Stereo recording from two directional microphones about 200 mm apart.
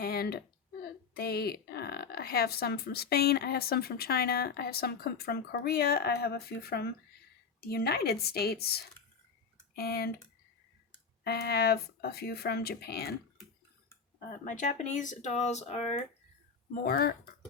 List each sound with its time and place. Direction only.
0.0 s a sound: 50° left (ahead or behind)
1.1 s speech: 50° left (ahead or behind)
11.2 s speech: 55° left (ahead or behind)
14.4 s speech: 40° left (ahead or behind)
16.8 s speech: 50° left (ahead or behind)